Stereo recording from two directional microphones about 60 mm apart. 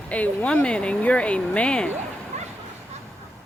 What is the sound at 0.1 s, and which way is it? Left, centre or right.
Speech, centre.